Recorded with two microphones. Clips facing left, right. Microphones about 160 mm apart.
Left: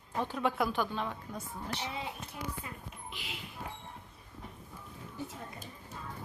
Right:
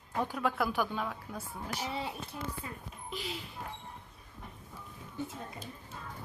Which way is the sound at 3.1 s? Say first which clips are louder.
Right 9 dB; 40° right (ahead or behind).